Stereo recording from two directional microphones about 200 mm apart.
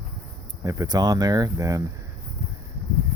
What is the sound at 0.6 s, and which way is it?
Speech, 20° right (ahead or behind).